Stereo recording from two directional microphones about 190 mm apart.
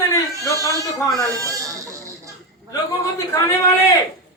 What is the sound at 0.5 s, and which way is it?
Speech, 15° right (ahead or behind).